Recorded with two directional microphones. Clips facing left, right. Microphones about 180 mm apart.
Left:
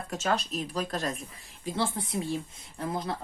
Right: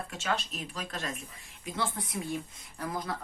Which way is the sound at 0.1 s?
40° left (ahead or behind).